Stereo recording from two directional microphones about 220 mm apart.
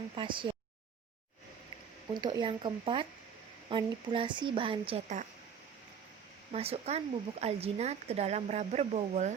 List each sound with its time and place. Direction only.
0.2 s speech: 20° right (ahead or behind)
2.1 s speech: 20° right (ahead or behind)
6.5 s speech: 30° right (ahead or behind)